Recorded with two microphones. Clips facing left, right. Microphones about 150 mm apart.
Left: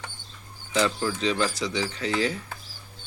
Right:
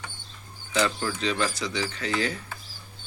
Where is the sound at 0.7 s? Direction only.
5° left (ahead or behind).